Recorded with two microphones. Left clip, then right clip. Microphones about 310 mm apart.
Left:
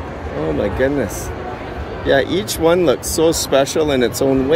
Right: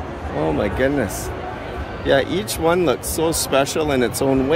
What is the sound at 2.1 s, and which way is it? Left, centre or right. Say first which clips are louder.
Speech: left 2 dB; centre.